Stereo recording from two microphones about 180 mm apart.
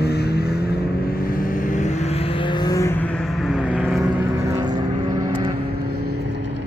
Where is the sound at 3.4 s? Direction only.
5° right (ahead or behind).